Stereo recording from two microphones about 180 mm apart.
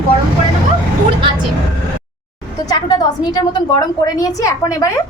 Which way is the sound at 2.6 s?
20° left (ahead or behind).